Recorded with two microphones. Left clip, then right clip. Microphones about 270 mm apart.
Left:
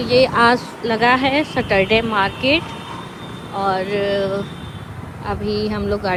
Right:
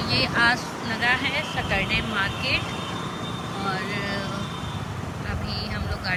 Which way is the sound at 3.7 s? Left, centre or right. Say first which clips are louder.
Left 9 dB; centre.